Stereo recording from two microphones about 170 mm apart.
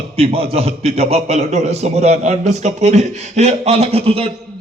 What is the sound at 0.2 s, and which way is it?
A man's voice, 35° right (ahead or behind).